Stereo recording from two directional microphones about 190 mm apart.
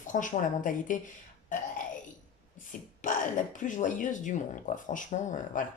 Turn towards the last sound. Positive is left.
turn(degrees=45)  # may be behind; listen again after turning